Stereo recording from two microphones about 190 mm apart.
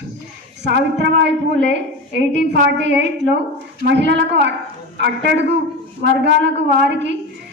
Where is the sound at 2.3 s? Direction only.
65° right (ahead or behind).